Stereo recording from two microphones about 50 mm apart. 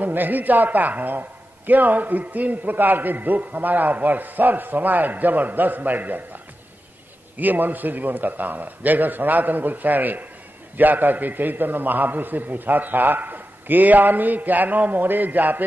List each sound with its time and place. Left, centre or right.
0.0 s a man's voice: right
7.3 s a man's voice: right